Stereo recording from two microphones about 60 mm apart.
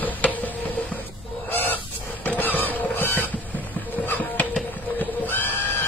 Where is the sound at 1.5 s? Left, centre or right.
Left.